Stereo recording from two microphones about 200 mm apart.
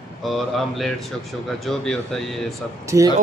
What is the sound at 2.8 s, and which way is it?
Speech, 15° right (ahead or behind).